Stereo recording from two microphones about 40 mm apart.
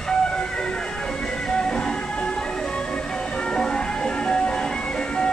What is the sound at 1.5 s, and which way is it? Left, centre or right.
Music, centre.